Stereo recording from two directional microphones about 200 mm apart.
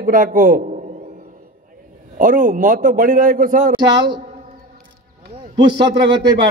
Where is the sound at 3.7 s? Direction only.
20° right (ahead or behind).